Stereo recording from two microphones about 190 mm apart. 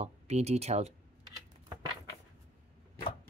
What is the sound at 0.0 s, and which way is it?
Speech, 35° right (ahead or behind).